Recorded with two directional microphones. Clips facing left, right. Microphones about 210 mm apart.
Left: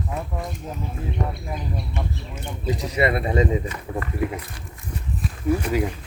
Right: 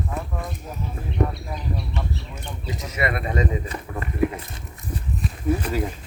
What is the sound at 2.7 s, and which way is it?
Speech, 30° left (ahead or behind).